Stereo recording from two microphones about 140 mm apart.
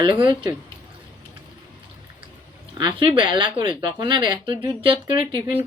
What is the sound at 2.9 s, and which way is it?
Speech, 35° right (ahead or behind).